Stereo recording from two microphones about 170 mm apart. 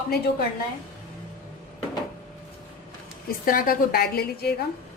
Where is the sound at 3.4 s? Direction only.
55° left (ahead or behind).